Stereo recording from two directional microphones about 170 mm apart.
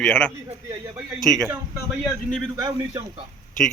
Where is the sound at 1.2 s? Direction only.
Centre (ahead or behind).